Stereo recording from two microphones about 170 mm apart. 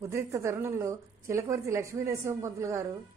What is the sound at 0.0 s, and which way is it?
Speech, 15° right (ahead or behind).